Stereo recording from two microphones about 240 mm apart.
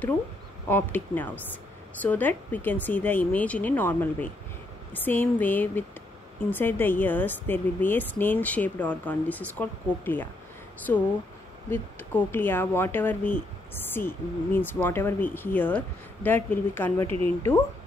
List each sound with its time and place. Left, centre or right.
0.7 s speech: centre
17.0 s a woman's voice: right